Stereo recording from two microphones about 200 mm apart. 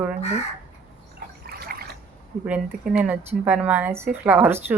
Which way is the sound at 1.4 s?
50° right (ahead or behind).